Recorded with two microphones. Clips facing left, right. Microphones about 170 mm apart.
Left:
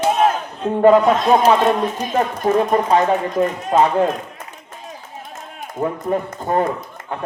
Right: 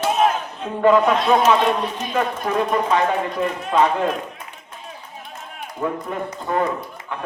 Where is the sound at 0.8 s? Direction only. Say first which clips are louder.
Left 3 dB; 40° left (ahead or behind).